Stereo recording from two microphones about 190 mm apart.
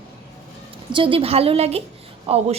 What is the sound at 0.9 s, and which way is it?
A woman's voice, 30° right (ahead or behind).